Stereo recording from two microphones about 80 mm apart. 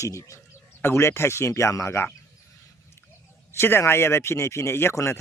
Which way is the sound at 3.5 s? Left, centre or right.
Left.